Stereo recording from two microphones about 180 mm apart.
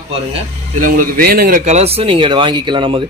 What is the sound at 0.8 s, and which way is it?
Speech, 50° right (ahead or behind).